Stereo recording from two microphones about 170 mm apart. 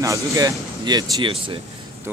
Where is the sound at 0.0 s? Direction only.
20° right (ahead or behind).